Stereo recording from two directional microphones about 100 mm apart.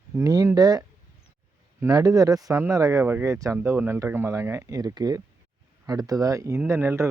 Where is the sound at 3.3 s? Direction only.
35° right (ahead or behind).